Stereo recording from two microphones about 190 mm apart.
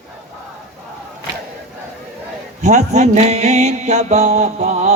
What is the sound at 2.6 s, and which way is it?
Mantra, 40° right (ahead or behind).